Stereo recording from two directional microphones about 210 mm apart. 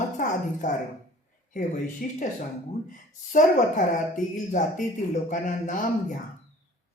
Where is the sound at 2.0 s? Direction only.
40° left (ahead or behind).